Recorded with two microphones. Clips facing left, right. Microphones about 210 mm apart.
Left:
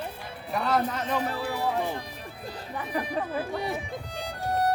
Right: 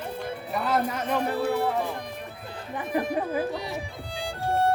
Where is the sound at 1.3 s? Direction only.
60° right (ahead or behind).